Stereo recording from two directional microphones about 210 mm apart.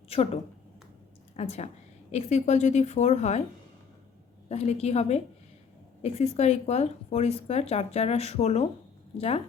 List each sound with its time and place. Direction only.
1.4 s speech: 30° left (ahead or behind)
4.4 s speech: 30° left (ahead or behind)